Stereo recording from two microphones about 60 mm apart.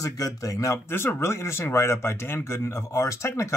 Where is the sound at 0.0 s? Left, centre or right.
Left.